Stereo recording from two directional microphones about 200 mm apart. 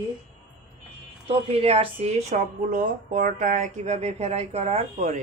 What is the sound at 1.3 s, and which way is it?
Speech, 30° right (ahead or behind).